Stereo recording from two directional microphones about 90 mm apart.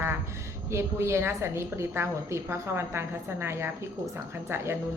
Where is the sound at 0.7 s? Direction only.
30° right (ahead or behind).